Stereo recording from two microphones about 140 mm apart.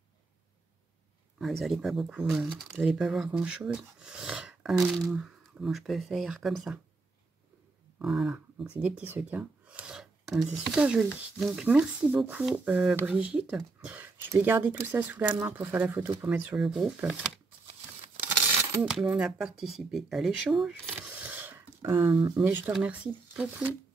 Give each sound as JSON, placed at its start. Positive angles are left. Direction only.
{"t": 1.4, "sound": "speech", "side_deg": 0}
{"t": 8.0, "sound": "a sound", "side_deg": 0}
{"t": 8.7, "sound": "speech", "side_deg": -10}
{"t": 16.5, "sound": "speech", "side_deg": -5}
{"t": 18.9, "sound": "speech", "side_deg": -5}